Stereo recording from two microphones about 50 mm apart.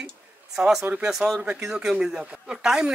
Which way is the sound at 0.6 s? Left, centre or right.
Centre.